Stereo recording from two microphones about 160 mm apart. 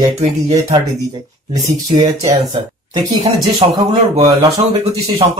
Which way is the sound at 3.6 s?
35° right (ahead or behind).